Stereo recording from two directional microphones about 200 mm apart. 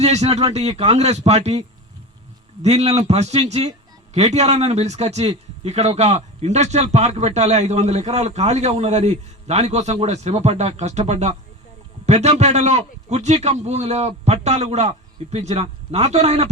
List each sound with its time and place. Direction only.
0.0 s speech: 30° right (ahead or behind)